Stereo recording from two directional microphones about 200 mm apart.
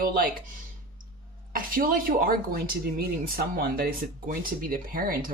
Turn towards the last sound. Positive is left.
turn(degrees=-45)  # may be behind; listen again after turning